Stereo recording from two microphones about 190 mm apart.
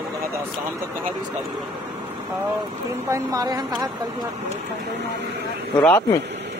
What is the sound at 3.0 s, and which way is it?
Speech, 15° right (ahead or behind).